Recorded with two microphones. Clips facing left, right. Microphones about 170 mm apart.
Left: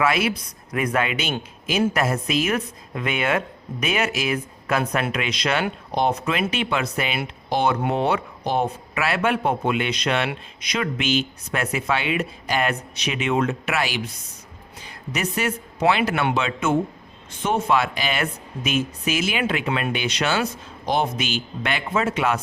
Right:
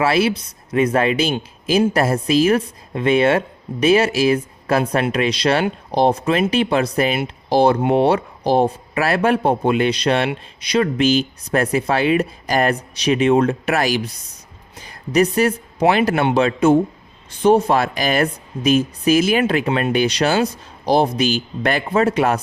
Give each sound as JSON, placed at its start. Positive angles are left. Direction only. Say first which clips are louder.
{"t": 0.0, "sound": "speech", "louder": "right 4 dB", "side_deg": -30}